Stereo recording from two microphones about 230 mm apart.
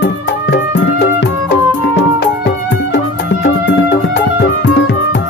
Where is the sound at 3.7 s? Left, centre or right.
Left.